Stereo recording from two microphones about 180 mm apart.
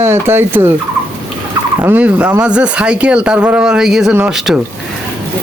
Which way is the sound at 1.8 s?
10° right (ahead or behind).